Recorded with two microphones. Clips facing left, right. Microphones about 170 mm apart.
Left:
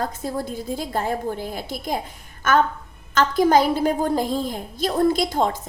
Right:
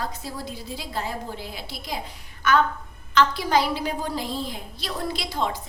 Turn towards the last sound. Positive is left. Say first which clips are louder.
# left 8 dB
turn(degrees=45)  # may be behind; listen again after turning